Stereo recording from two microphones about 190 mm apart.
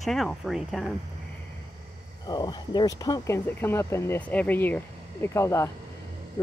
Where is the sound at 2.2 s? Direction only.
20° left (ahead or behind).